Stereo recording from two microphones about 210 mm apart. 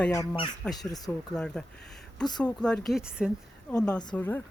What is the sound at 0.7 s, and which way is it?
Speech, 20° left (ahead or behind).